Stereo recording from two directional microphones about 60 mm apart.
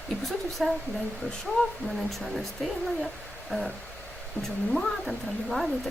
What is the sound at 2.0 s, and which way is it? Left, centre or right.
Speech, centre.